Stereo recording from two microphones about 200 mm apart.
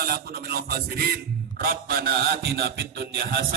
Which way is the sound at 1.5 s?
45° right (ahead or behind).